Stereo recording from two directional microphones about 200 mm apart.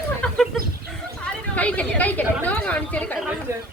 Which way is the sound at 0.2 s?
Centre (ahead or behind).